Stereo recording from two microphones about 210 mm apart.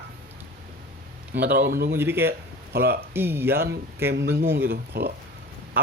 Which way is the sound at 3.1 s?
10° right (ahead or behind).